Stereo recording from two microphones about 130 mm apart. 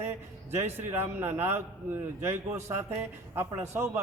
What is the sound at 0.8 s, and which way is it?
A man's voice, 20° right (ahead or behind).